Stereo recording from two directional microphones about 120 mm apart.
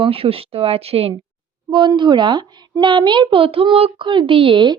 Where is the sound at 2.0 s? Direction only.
40° right (ahead or behind).